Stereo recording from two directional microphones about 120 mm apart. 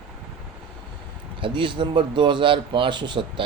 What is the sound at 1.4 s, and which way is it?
Speech, 45° right (ahead or behind).